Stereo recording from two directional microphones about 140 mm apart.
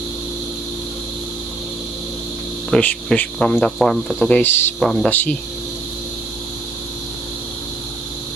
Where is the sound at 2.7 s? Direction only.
10° left (ahead or behind).